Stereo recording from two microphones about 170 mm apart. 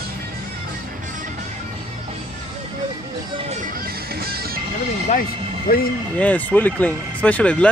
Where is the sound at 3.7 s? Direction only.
60° right (ahead or behind).